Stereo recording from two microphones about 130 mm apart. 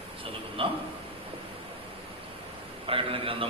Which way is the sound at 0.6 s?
45° right (ahead or behind).